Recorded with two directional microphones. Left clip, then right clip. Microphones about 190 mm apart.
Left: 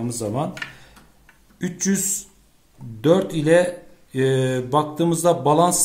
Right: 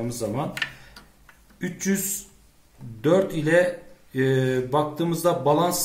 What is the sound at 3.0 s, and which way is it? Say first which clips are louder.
Speech: left 3 dB; 45° left (ahead or behind).